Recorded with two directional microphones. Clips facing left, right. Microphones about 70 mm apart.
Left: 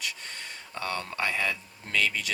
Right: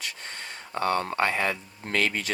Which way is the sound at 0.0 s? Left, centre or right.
Right.